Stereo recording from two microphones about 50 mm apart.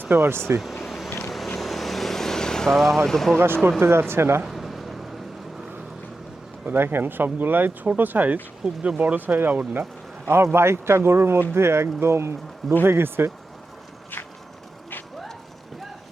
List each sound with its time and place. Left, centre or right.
0.2 s speech: right
0.6 s vehicle: centre
3.1 s speech: centre
3.3 s speech: right
4.4 s a sound: centre
6.7 s speech: right
10.2 s speech: right
12.8 s speech: right